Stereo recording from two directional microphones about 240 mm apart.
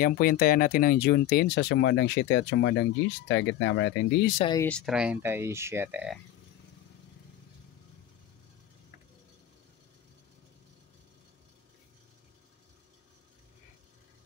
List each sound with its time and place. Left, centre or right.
0.0 s speech: left
4.5 s speech: centre